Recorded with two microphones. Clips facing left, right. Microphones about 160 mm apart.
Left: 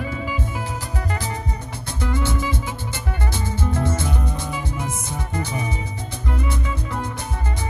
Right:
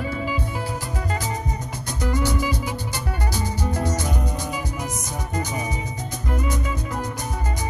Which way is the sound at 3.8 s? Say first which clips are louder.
Left 1 dB; 15° right (ahead or behind).